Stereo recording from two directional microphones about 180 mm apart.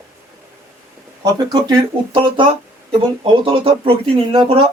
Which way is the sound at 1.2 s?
25° right (ahead or behind).